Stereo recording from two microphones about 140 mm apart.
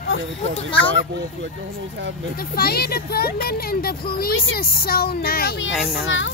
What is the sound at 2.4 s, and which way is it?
Speech, 90° left.